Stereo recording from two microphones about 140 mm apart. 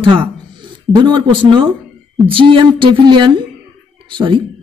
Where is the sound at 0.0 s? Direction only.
35° right (ahead or behind).